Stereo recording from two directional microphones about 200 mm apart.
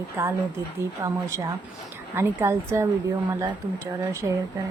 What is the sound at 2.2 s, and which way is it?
A woman's voice, 15° right (ahead or behind).